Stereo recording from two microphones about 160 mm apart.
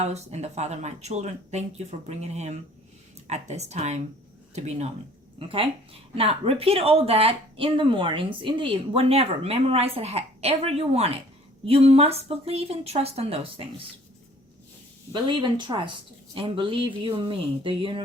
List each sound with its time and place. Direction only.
0.0 s speech: 45° right (ahead or behind)
5.4 s a woman's voice: 35° right (ahead or behind)
15.1 s a woman's voice: 30° right (ahead or behind)